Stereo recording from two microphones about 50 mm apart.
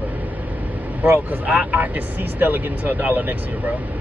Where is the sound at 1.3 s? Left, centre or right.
Right.